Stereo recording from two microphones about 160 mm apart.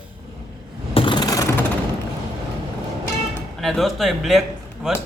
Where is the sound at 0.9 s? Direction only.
30° left (ahead or behind).